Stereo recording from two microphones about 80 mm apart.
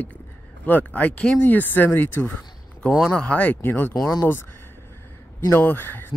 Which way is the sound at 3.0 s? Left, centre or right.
Centre.